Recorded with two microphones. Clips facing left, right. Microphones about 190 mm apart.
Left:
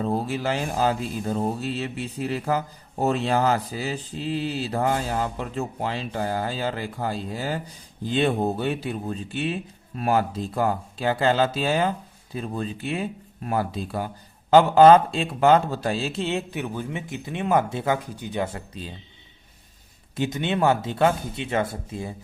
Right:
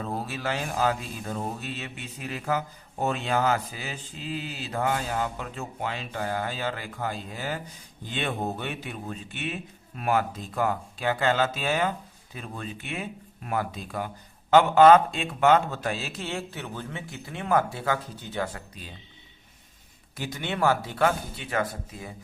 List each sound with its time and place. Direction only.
0.0 s a man's voice: 30° left (ahead or behind)
20.1 s a man's voice: 20° left (ahead or behind)